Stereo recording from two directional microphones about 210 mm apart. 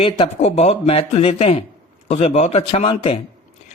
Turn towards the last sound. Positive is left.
turn(degrees=25)  # may be behind; listen again after turning